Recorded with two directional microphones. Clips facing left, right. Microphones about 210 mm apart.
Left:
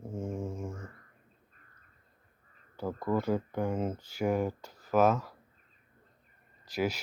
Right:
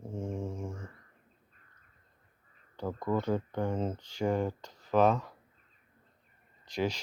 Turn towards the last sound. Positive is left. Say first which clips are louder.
# left 1 dB
turn(degrees=5)  # may be behind; listen again after turning